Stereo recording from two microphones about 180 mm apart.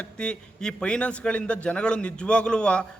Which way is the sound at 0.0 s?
5° left (ahead or behind).